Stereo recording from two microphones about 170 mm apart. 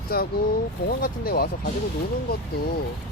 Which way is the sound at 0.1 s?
60° left (ahead or behind).